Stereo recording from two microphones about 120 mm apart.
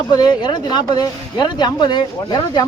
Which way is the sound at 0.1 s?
35° left (ahead or behind).